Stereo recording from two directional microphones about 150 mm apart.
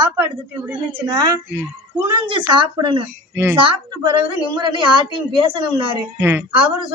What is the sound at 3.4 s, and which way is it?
Speech, 15° right (ahead or behind).